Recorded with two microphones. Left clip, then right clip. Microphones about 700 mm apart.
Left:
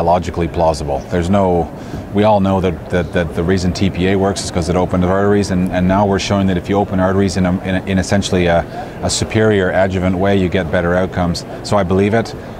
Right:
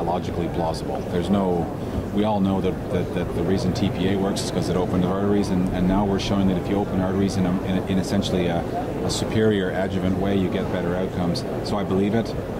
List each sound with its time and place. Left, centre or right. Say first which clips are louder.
0.1 s speech: left 10 dB; left